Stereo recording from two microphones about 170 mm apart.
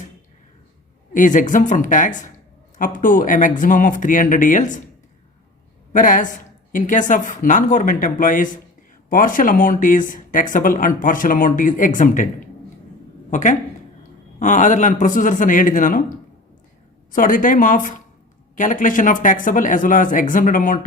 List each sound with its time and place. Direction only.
1.1 s speech: 50° left (ahead or behind)
5.9 s speech: 50° left (ahead or behind)
17.1 s speech: 55° left (ahead or behind)